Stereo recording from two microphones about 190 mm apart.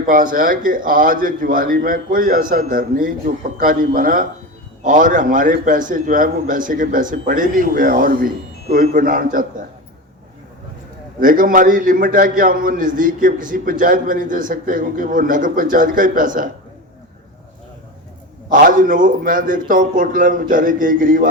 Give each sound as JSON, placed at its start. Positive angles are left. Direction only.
{"t": 0.0, "sound": "a man's voice", "side_deg": -45}
{"t": 11.2, "sound": "a man's voice", "side_deg": -45}
{"t": 18.5, "sound": "a man's voice", "side_deg": -45}